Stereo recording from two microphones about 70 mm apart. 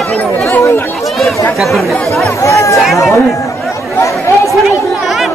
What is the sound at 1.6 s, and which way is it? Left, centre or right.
Speech, centre.